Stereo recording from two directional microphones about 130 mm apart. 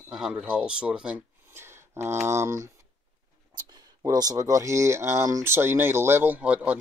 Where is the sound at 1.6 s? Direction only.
20° right (ahead or behind).